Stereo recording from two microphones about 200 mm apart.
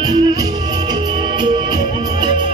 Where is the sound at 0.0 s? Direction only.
20° right (ahead or behind).